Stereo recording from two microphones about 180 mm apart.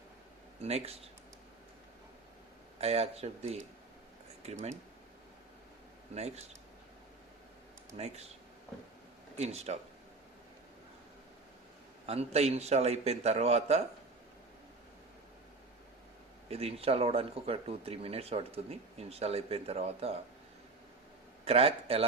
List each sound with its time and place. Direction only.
0.6 s speech: 35° right (ahead or behind)
2.8 s speech: 35° right (ahead or behind)
6.1 s speech: 35° right (ahead or behind)
7.9 s speech: 35° right (ahead or behind)
9.4 s speech: 35° right (ahead or behind)
12.0 s speech: 35° right (ahead or behind)
16.5 s speech: 35° right (ahead or behind)
21.4 s speech: 35° right (ahead or behind)